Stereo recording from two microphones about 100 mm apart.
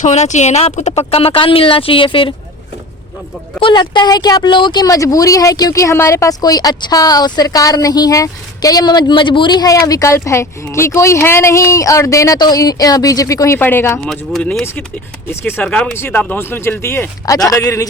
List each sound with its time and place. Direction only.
0.2 s speech: 90° left; by 2.3 s 60° left (ahead or behind)
3.6 s speech: 50° left (ahead or behind); by 13.6 s 35° left (ahead or behind)
13.6 s speech: 20° left (ahead or behind)
14.3 s speech: 5° left (ahead or behind)
15.3 s speech: 25° left (ahead or behind)
15.6 s speech: 10° left (ahead or behind)
17.3 s speech: 40° left (ahead or behind)